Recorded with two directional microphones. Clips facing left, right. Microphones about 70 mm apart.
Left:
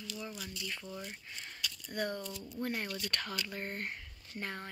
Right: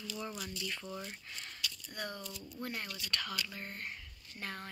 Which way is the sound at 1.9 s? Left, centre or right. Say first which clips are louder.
Left 9 dB; left.